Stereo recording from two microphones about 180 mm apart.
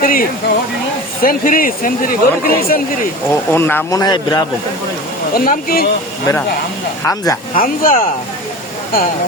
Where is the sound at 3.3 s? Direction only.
10° left (ahead or behind).